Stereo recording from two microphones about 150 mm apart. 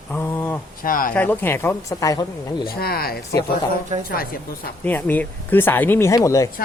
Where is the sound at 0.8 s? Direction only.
70° left (ahead or behind).